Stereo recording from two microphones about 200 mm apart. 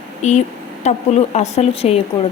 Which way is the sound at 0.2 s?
35° left (ahead or behind).